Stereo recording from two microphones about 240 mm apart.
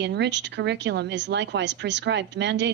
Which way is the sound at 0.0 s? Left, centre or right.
Right.